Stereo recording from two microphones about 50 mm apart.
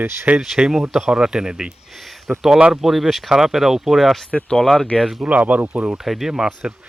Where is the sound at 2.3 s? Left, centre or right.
Right.